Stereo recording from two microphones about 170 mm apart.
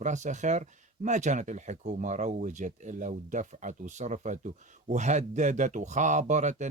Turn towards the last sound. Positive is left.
turn(degrees=-45)  # may be behind; listen again after turning